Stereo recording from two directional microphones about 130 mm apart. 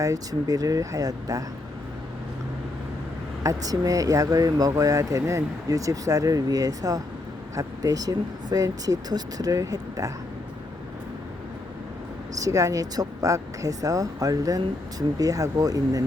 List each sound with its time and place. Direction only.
0.0 s speech: 25° right (ahead or behind)
3.4 s speech: 25° right (ahead or behind)
12.4 s speech: 25° right (ahead or behind)